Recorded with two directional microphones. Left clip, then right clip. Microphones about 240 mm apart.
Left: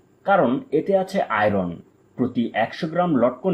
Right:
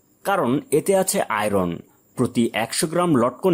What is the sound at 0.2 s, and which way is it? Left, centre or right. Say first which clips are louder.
Speech: left 3 dB; right.